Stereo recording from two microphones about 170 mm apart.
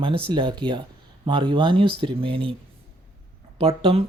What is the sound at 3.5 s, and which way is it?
Speech, 35° right (ahead or behind).